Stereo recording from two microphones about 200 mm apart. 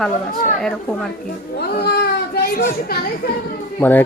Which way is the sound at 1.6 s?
50° left (ahead or behind).